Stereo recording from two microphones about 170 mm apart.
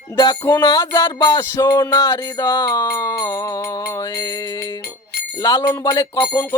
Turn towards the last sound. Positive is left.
turn(degrees=15)  # may be behind; listen again after turning